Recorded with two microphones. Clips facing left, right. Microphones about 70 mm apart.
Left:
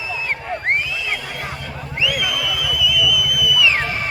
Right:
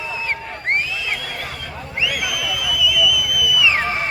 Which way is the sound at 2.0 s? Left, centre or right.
Centre.